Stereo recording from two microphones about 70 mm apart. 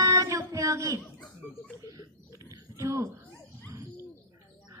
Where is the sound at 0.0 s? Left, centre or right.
Right.